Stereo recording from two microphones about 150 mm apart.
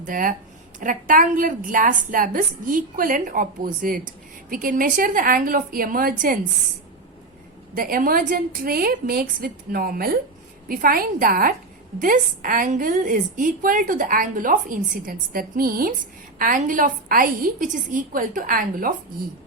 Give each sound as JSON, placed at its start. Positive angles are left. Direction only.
{"t": 0.0, "sound": "a woman's voice", "side_deg": -65}
{"t": 7.8, "sound": "a woman's voice", "side_deg": -70}
{"t": 11.9, "sound": "a woman's voice", "side_deg": -65}
{"t": 16.4, "sound": "a woman's voice", "side_deg": -65}